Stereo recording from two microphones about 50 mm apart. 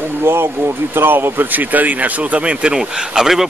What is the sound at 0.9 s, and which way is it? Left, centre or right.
Speech, right.